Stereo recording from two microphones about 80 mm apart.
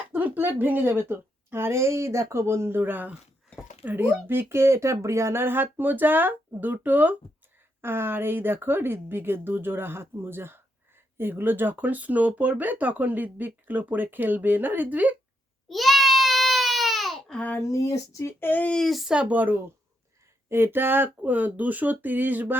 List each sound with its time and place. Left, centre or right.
0.1 s speech: right
15.7 s baby cry: centre
17.3 s a child's voice: centre
17.6 s speech: left
18.7 s speech: centre
19.1 s speech: centre